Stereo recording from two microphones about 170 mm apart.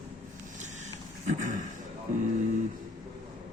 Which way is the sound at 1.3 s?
45° right (ahead or behind).